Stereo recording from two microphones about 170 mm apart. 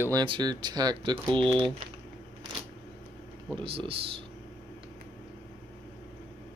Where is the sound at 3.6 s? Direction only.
30° right (ahead or behind).